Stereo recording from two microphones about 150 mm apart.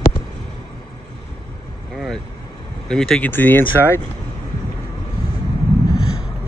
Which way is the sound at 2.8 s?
5° left (ahead or behind).